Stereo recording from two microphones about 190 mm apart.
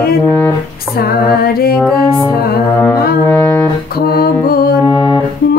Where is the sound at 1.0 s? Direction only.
50° left (ahead or behind).